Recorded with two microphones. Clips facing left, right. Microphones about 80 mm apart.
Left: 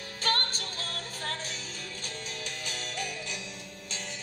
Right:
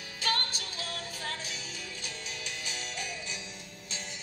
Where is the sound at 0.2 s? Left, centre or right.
Left.